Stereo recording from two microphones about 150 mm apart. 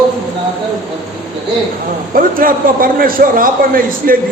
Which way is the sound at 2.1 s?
70° right (ahead or behind).